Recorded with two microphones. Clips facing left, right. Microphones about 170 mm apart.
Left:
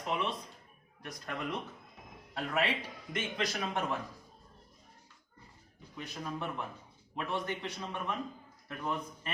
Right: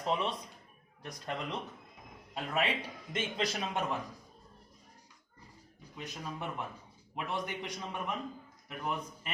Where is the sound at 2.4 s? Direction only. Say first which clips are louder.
Even; 15° right (ahead or behind).